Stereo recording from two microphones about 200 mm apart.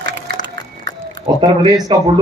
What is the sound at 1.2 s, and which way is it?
Speech, 20° right (ahead or behind).